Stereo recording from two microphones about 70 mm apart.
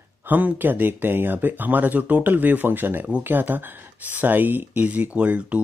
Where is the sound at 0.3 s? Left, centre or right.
Right.